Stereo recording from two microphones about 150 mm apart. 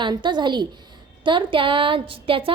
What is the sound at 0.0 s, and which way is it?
A woman's voice, 30° right (ahead or behind).